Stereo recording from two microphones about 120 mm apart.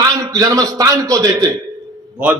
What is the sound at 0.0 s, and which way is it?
A man's voice, 30° right (ahead or behind).